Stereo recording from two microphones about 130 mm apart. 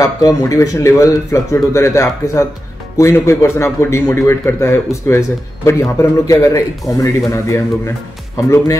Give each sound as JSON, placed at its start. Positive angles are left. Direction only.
{"t": 0.0, "sound": "a man's voice", "side_deg": 25}